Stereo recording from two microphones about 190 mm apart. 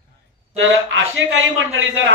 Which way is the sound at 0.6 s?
90° right.